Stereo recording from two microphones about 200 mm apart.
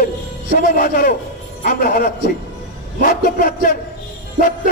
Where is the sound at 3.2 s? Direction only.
45° left (ahead or behind).